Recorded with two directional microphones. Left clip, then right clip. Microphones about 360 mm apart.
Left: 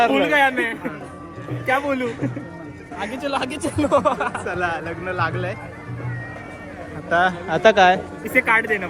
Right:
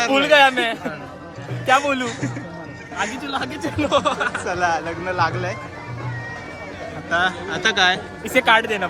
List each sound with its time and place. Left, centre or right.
0.1 s speech: centre
3.6 s speech: left
4.4 s speech: centre
7.1 s speech: centre
8.3 s speech: centre